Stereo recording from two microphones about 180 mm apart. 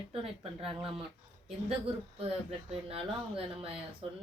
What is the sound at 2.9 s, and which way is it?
Speech, 30° right (ahead or behind).